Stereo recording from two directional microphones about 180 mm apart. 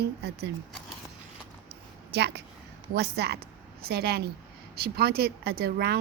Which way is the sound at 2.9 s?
65° right (ahead or behind).